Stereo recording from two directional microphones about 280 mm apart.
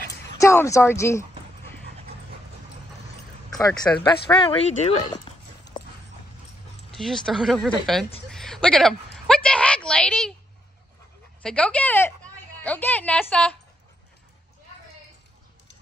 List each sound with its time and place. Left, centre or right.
0.4 s speech: centre
3.6 s speech: centre
5.7 s dog: centre
6.9 s a woman's voice: centre
8.3 s a sound: centre
11.4 s a woman's voice: centre